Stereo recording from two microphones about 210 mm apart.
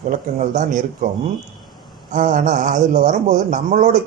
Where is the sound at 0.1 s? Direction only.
35° right (ahead or behind).